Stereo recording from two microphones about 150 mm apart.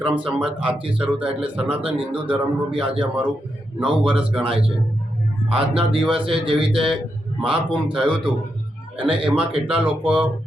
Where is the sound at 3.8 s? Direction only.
35° right (ahead or behind).